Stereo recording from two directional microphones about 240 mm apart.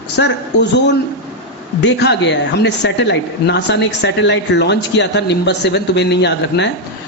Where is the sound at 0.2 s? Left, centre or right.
Left.